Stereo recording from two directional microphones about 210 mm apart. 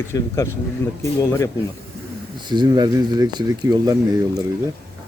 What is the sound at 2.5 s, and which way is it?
Speech, 20° right (ahead or behind).